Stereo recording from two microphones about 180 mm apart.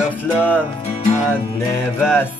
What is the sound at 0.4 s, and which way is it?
Music, 10° left (ahead or behind).